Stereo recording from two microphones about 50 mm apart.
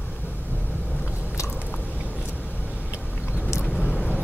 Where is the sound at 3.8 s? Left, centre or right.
Left.